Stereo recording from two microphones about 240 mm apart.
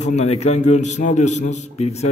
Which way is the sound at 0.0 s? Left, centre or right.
Left.